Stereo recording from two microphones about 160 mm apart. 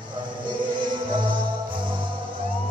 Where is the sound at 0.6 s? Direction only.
30° right (ahead or behind).